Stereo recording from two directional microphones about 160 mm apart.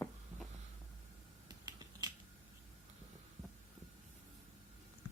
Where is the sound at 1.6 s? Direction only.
25° right (ahead or behind).